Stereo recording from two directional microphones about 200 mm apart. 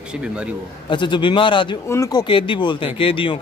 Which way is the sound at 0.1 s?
5° right (ahead or behind).